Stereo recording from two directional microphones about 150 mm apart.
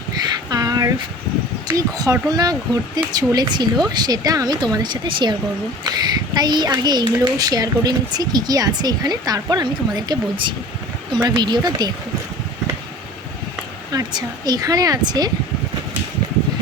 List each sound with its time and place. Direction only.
0.5 s a sound: 25° right (ahead or behind)
1.6 s speech: 25° right (ahead or behind)
13.9 s speech: 30° right (ahead or behind)